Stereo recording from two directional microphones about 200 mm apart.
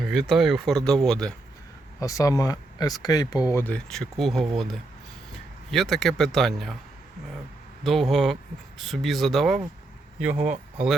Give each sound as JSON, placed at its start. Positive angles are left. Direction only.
{"t": 0.1, "sound": "speech", "side_deg": 0}
{"t": 2.0, "sound": "speech", "side_deg": 15}
{"t": 7.9, "sound": "speech", "side_deg": 0}